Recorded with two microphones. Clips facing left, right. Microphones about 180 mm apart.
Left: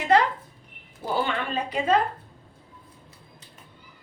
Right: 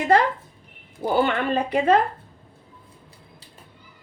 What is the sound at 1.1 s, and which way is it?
Speech, 60° right (ahead or behind).